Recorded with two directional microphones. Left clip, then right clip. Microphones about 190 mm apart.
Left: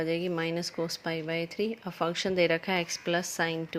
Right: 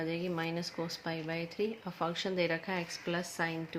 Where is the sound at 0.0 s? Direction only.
40° left (ahead or behind).